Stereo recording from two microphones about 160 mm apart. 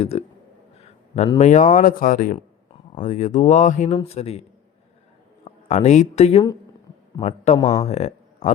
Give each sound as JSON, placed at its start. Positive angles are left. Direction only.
{"t": 0.0, "sound": "speech", "side_deg": 40}
{"t": 0.8, "sound": "a sound", "side_deg": 45}
{"t": 1.4, "sound": "speech", "side_deg": 50}
{"t": 5.5, "sound": "speech", "side_deg": 45}
{"t": 7.6, "sound": "speech", "side_deg": 25}
{"t": 7.9, "sound": "speech", "side_deg": 45}